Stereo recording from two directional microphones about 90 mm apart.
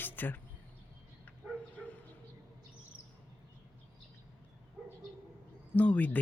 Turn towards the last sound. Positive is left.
turn(degrees=15)  # may be behind; listen again after turning